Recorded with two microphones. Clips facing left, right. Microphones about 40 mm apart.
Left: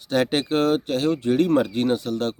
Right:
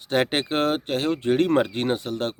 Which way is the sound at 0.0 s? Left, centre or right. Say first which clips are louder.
Left 1 dB; right.